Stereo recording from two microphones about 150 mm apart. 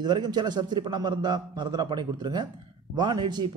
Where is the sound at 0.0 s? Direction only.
30° right (ahead or behind).